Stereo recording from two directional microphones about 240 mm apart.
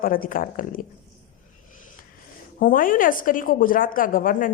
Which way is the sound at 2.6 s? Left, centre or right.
Left.